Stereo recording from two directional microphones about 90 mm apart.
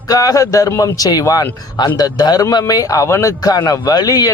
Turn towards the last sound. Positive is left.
turn(degrees=45)  # may be behind; listen again after turning